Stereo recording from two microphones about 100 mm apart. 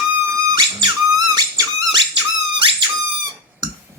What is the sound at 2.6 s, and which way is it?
Squeak, 50° right (ahead or behind).